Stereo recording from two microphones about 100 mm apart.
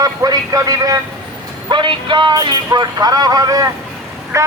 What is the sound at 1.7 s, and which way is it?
Speech, 50° right (ahead or behind).